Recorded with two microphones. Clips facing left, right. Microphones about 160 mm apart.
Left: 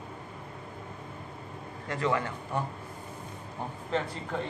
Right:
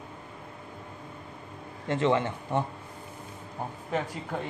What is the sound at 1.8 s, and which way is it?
Speech, 25° right (ahead or behind).